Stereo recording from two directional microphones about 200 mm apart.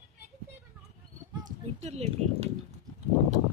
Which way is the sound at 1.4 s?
30° right (ahead or behind).